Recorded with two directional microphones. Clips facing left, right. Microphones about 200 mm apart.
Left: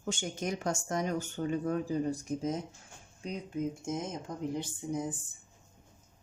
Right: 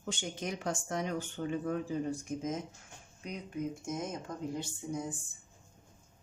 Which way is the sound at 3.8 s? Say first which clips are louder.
Left 2 dB; 25° left (ahead or behind).